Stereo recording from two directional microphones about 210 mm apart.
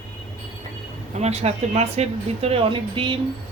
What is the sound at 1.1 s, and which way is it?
Speech, 30° right (ahead or behind).